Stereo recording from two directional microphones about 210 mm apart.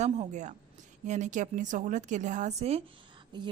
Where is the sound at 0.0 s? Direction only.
35° right (ahead or behind).